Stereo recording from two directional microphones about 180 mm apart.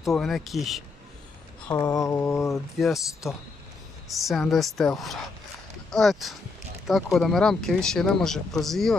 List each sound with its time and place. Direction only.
0.0 s speech: centre (ahead or behind)
1.7 s mantra: 20° left (ahead or behind)
4.1 s speech: centre (ahead or behind)